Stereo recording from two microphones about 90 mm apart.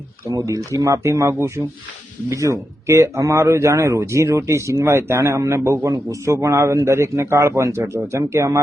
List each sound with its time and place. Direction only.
0.3 s a man's voice: 35° right (ahead or behind)